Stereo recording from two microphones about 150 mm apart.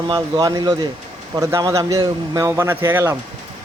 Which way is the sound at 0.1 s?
25° right (ahead or behind).